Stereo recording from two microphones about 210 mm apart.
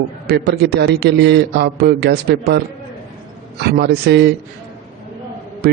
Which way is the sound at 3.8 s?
50° right (ahead or behind).